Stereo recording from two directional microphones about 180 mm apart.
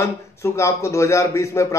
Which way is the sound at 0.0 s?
15° left (ahead or behind).